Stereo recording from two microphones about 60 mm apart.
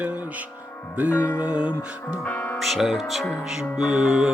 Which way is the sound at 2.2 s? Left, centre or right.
Left.